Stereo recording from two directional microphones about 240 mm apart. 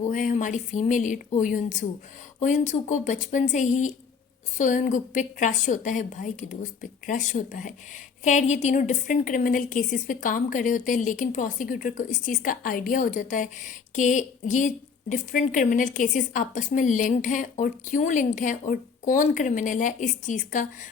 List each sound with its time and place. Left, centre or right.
0.0 s a woman's voice: left